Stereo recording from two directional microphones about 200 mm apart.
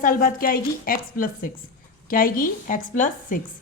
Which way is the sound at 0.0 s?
45° left (ahead or behind).